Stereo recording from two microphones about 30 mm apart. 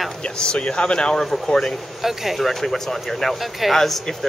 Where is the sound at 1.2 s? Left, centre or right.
Centre.